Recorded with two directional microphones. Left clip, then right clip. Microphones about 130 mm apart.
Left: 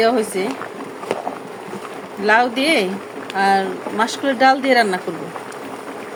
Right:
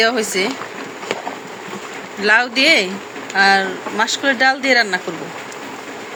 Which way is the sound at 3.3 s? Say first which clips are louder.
Right 3 dB; 25° left (ahead or behind).